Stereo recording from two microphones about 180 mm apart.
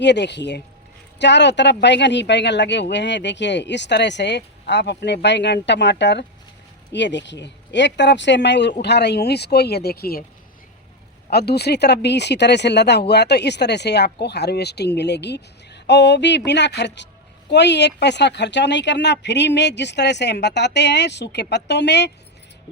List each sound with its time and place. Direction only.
0.0 s speech: 70° left (ahead or behind)
11.3 s speech: 65° left (ahead or behind)